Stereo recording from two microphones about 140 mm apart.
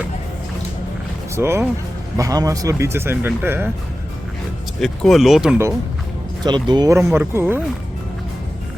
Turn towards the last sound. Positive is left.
turn(degrees=-15)  # may be behind; listen again after turning